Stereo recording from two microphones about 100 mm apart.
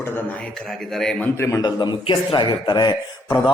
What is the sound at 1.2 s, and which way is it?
Speech, 30° left (ahead or behind).